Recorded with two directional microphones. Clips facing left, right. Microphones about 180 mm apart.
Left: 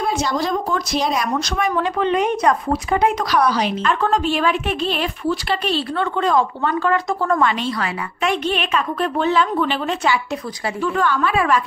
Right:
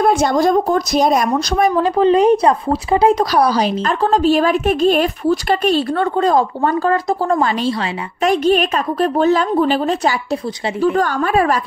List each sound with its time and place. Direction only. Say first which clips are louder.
0.0 s speech: right 7 dB; 50° right (ahead or behind)